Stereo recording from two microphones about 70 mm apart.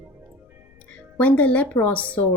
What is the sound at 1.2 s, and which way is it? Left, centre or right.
A woman's voice, left.